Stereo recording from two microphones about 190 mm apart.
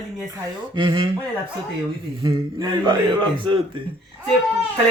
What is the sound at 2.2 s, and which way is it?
A man's voice, 25° right (ahead or behind).